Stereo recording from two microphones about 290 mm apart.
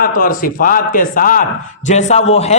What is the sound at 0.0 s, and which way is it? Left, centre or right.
A man's voice, left.